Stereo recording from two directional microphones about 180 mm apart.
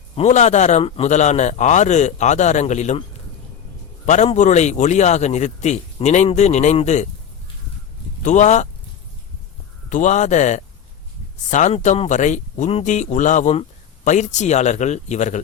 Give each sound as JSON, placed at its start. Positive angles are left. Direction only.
{"t": 0.2, "sound": "speech", "side_deg": 40}
{"t": 4.0, "sound": "speech", "side_deg": 40}
{"t": 8.2, "sound": "speech", "side_deg": 40}
{"t": 9.9, "sound": "a man's voice", "side_deg": 45}